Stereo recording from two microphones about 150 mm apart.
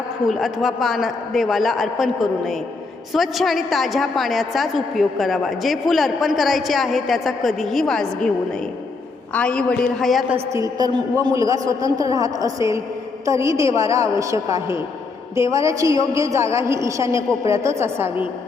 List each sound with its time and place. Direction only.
0.3 s a woman's voice: centre (ahead or behind)
10.3 s a woman's voice: 20° right (ahead or behind)